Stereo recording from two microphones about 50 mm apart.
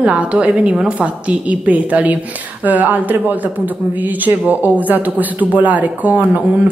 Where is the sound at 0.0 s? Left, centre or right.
Right.